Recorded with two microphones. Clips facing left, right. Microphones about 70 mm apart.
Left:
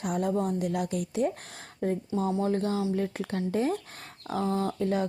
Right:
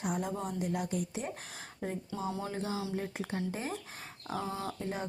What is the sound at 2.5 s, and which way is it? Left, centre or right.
Speech, left.